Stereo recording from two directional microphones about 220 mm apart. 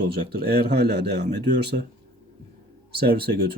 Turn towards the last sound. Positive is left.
turn(degrees=-45)  # may be behind; listen again after turning